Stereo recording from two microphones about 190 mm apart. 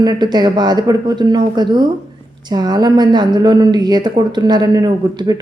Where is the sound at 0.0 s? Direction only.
20° right (ahead or behind).